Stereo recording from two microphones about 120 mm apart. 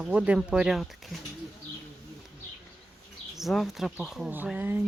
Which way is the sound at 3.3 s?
Centre (ahead or behind).